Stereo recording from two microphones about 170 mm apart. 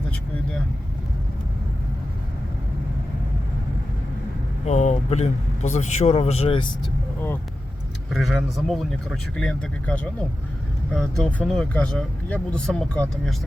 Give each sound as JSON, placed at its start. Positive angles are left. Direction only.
{"t": 4.6, "sound": "a man's voice", "side_deg": 45}
{"t": 8.1, "sound": "speech", "side_deg": 0}